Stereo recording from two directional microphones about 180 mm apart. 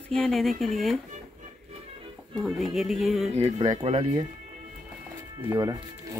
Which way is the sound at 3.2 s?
35° right (ahead or behind).